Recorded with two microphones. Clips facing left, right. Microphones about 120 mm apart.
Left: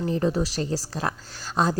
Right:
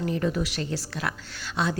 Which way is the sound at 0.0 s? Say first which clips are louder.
Left 3 dB; 30° left (ahead or behind).